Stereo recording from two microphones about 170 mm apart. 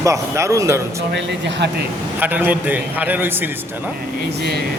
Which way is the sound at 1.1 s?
90° right.